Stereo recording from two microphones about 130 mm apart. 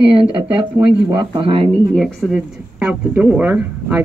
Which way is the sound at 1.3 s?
40° right (ahead or behind).